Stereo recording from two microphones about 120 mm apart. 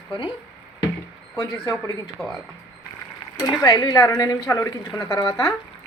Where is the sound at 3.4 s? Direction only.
30° left (ahead or behind).